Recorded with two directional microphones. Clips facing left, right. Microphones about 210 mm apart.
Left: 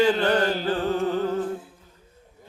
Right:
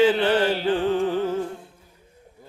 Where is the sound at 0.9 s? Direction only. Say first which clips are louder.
Right 1 dB; 10° right (ahead or behind).